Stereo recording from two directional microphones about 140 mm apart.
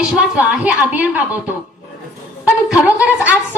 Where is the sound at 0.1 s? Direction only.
10° right (ahead or behind).